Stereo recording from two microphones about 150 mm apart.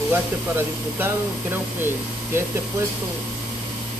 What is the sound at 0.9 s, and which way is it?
Speech, 15° right (ahead or behind).